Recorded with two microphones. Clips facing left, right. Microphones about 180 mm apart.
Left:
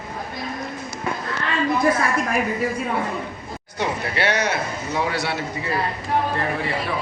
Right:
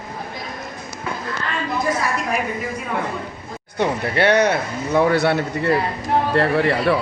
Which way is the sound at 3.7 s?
55° right (ahead or behind).